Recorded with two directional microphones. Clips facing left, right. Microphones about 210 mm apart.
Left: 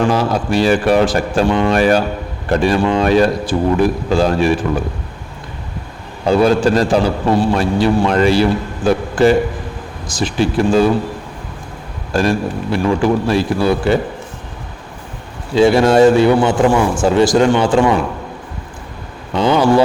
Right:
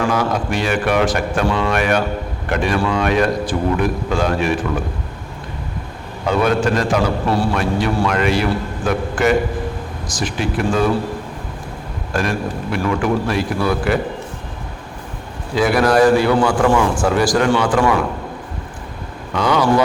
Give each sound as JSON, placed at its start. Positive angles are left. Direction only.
{"t": 0.0, "sound": "speech", "side_deg": 30}
{"t": 6.2, "sound": "a man's voice", "side_deg": 30}
{"t": 12.1, "sound": "a man's voice", "side_deg": 30}
{"t": 15.5, "sound": "a man's voice", "side_deg": 25}
{"t": 19.3, "sound": "a man's voice", "side_deg": 30}